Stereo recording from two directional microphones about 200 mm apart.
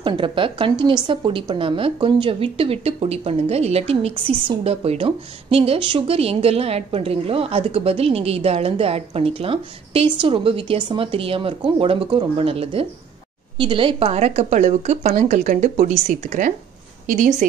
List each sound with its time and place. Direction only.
0.0 s a woman's voice: 25° right (ahead or behind); by 17.5 s 40° right (ahead or behind)